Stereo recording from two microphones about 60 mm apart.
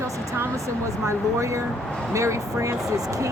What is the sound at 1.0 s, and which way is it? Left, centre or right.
Speech, right.